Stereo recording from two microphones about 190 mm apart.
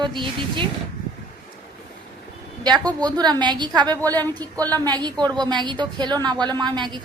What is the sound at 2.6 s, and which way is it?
A woman's voice, 20° right (ahead or behind).